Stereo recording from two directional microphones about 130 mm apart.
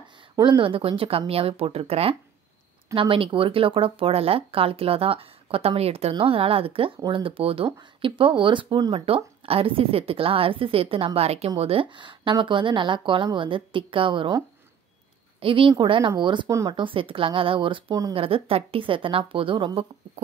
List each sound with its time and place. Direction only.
0.4 s a woman's voice: 40° right (ahead or behind)
9.0 s a woman's voice: 45° right (ahead or behind)
15.4 s a woman's voice: 45° right (ahead or behind)
16.4 s speech: 25° right (ahead or behind)
16.7 s a woman's voice: 40° right (ahead or behind)